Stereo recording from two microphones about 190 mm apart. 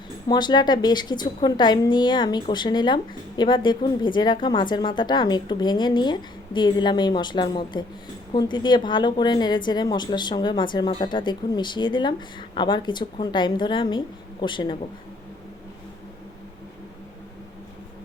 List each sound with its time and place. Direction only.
0.3 s a woman's voice: 20° left (ahead or behind)